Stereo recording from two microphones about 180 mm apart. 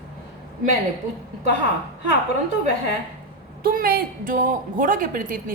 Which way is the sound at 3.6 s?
55° right (ahead or behind).